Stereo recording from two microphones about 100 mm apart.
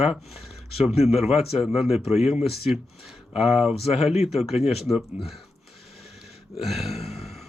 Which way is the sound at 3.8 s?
90° left.